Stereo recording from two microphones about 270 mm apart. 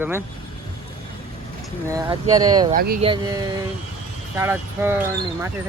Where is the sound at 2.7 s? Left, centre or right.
Right.